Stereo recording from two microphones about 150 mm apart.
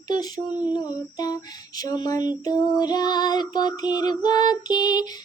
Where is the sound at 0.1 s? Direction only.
25° left (ahead or behind).